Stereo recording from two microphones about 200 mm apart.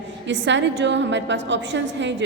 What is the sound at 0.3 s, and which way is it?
A woman's voice, 65° right (ahead or behind).